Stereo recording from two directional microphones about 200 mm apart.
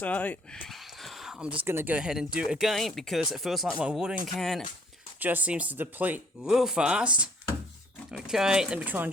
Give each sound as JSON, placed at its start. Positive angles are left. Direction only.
{"t": 0.0, "sound": "speech", "side_deg": 5}